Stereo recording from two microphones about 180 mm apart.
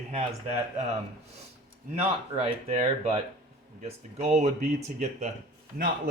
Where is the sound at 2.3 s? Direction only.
35° right (ahead or behind).